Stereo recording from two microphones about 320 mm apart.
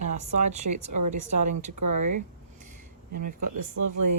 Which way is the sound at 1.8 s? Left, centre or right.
Right.